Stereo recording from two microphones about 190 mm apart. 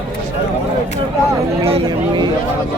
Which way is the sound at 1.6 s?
30° right (ahead or behind).